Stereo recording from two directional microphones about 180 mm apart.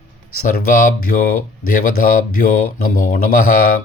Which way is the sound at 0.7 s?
50° left (ahead or behind).